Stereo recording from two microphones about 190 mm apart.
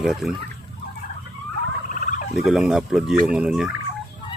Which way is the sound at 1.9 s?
40° left (ahead or behind).